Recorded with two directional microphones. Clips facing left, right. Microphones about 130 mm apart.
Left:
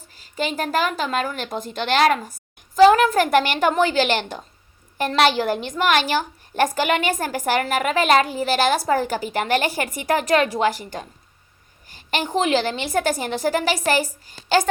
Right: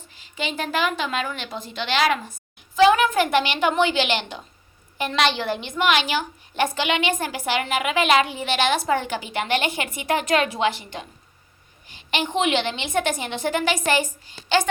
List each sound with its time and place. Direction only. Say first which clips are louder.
0.1 s a woman's voice: left 4 dB; 40° left (ahead or behind)